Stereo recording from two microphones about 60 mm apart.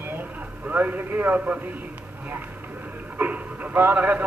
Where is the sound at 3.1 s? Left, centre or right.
Right.